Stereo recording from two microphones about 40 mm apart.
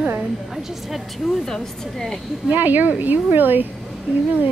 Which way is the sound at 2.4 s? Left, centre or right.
Right.